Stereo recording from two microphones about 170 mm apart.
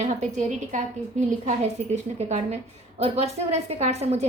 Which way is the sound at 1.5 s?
40° right (ahead or behind).